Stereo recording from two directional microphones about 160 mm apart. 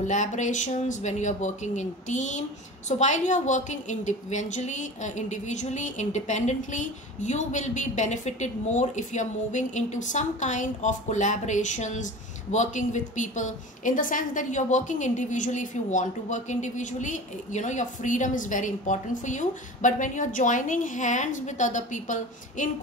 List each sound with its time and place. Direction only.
0.0 s a woman's voice: 50° left (ahead or behind)